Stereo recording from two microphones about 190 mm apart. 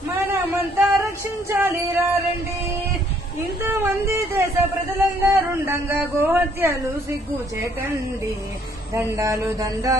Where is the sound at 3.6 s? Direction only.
10° right (ahead or behind).